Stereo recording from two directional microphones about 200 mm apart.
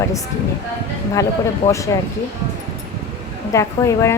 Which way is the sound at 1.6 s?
15° left (ahead or behind).